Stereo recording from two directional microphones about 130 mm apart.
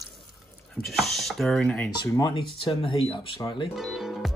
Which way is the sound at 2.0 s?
35° left (ahead or behind).